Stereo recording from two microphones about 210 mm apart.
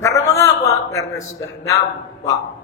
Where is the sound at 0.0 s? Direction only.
15° left (ahead or behind).